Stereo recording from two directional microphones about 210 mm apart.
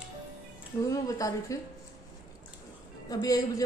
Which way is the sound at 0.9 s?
15° left (ahead or behind).